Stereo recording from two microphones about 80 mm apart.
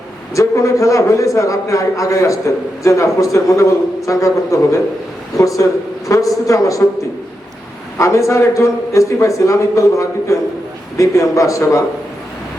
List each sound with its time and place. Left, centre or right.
0.3 s a man's voice: left
7.9 s a man's voice: left